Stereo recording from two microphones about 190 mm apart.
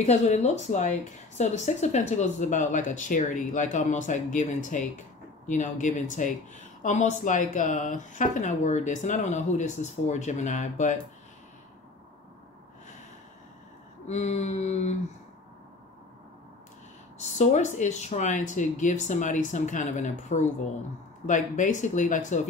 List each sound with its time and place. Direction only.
0.0 s speech: 40° left (ahead or behind)
14.0 s speech: 35° left (ahead or behind)
17.2 s speech: 35° left (ahead or behind)